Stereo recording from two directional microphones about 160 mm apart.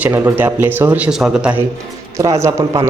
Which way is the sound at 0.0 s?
15° right (ahead or behind).